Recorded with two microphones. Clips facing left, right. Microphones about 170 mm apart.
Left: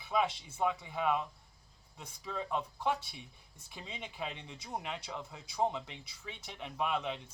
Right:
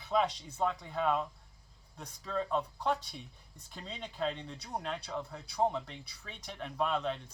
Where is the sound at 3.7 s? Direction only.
10° left (ahead or behind).